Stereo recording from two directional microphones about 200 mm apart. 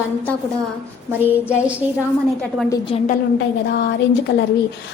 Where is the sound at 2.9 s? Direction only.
30° left (ahead or behind).